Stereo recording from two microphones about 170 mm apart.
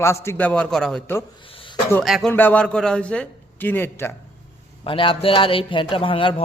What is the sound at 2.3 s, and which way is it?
A man's voice, 10° left (ahead or behind).